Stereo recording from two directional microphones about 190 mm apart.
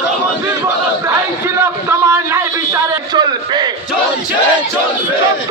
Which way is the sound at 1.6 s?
15° right (ahead or behind).